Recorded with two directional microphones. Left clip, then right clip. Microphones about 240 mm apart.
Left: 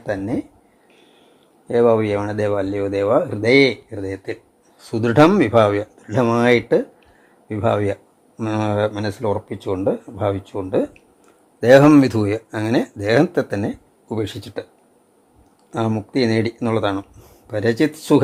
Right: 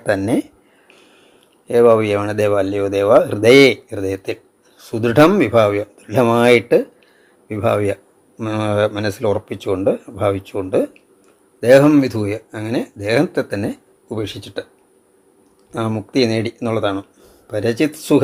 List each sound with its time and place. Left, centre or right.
0.0 s speech: centre
1.6 s speech: centre
4.8 s speech: centre
15.7 s speech: centre